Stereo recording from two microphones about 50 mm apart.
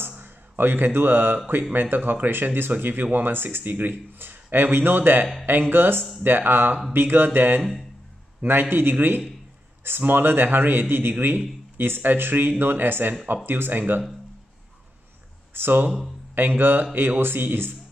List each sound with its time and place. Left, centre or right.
0.2 s a man's voice: right
15.5 s a man's voice: right